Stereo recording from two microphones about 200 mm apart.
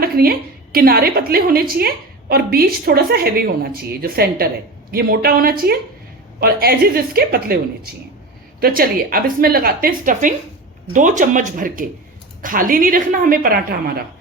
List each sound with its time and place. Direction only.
0.0 s a woman's voice: 50° right (ahead or behind)